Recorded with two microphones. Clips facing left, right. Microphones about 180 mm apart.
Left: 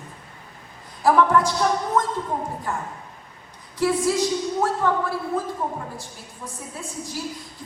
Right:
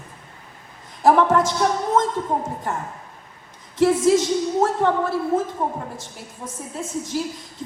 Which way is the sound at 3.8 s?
25° right (ahead or behind).